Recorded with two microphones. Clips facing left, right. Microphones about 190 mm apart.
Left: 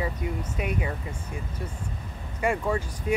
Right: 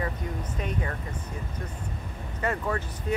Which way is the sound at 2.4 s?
10° left (ahead or behind).